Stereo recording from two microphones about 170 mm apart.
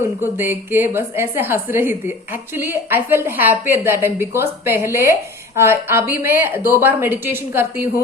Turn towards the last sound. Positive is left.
turn(degrees=-10)  # may be behind; listen again after turning